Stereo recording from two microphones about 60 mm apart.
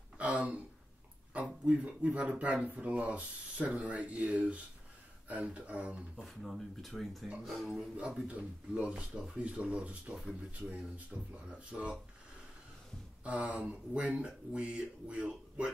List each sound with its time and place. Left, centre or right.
0.2 s a sound: right
1.3 s speech: right
6.1 s speech: centre
7.7 s speech: centre
13.2 s speech: right